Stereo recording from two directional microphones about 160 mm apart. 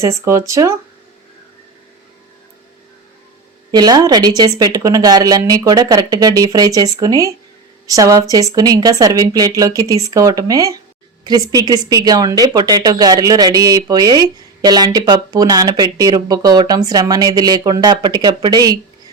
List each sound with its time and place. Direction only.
0.0 s speech: 20° right (ahead or behind)
3.7 s speech: 25° right (ahead or behind)